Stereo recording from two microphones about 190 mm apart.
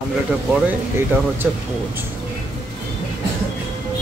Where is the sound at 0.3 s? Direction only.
5° right (ahead or behind).